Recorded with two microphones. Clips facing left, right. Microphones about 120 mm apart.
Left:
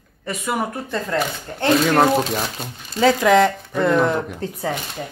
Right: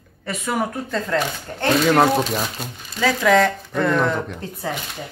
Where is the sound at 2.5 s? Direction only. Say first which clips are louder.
Left 4 dB; 20° left (ahead or behind).